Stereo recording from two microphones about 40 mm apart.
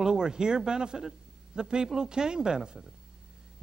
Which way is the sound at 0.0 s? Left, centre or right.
Centre.